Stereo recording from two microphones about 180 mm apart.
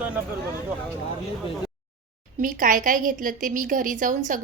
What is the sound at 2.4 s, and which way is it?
A woman's voice, 45° right (ahead or behind).